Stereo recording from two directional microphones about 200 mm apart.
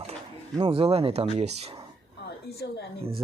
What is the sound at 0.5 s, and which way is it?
Speech, 30° right (ahead or behind).